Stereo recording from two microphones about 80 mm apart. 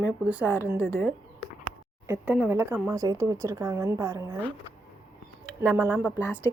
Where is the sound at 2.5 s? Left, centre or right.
Right.